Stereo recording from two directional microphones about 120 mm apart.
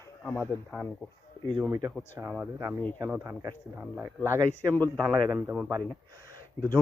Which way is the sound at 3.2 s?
30° right (ahead or behind).